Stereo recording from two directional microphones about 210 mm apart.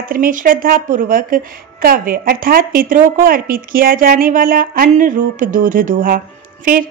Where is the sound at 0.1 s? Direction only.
40° right (ahead or behind).